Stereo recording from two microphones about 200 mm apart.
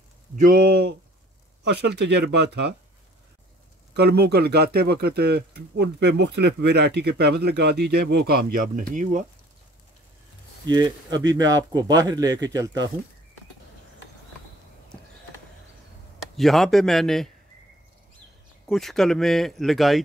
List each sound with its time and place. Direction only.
0.4 s speech: 45° right (ahead or behind)
3.9 s speech: 55° right (ahead or behind)
10.7 s speech: 20° right (ahead or behind)
16.3 s speech: centre (ahead or behind)
18.7 s speech: centre (ahead or behind)